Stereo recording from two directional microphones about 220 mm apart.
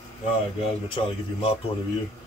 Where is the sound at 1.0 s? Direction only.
25° left (ahead or behind).